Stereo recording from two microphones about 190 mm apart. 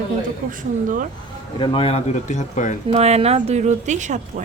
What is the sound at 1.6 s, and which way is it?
Speech, 25° left (ahead or behind).